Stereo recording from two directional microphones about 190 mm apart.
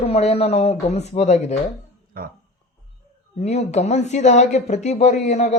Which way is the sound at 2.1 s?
50° right (ahead or behind).